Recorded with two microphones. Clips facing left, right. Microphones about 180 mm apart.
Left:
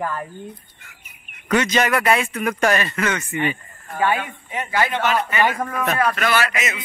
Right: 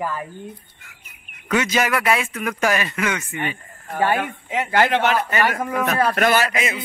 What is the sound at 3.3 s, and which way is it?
Speech, 5° left (ahead or behind).